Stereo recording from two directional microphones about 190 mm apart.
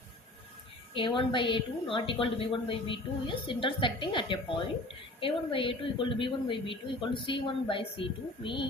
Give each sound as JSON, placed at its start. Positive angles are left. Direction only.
{"t": 0.9, "sound": "a woman's voice", "side_deg": 25}